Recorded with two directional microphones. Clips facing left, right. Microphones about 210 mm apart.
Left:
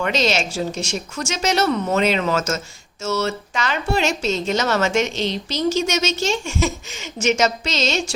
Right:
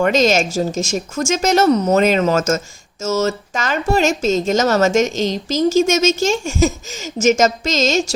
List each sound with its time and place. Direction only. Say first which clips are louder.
0.0 s a woman's voice: right 6 dB; 45° right (ahead or behind)